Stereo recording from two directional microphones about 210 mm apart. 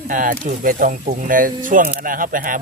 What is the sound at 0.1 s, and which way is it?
Speech, 40° right (ahead or behind).